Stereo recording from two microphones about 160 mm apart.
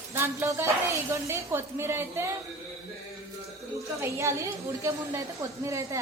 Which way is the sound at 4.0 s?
15° right (ahead or behind).